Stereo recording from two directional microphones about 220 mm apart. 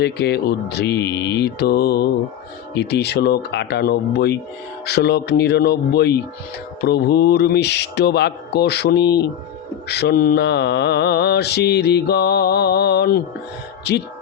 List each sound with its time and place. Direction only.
0.0 s mantra: 50° left (ahead or behind)